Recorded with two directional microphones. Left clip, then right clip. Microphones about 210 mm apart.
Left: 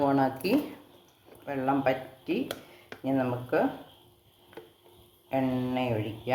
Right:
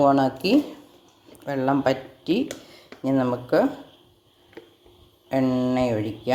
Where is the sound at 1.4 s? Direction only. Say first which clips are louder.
Right 5 dB; 35° right (ahead or behind).